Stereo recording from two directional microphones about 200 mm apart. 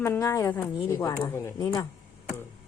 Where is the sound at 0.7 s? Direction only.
25° left (ahead or behind).